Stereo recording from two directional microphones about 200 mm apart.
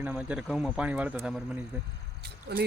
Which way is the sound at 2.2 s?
50° right (ahead or behind).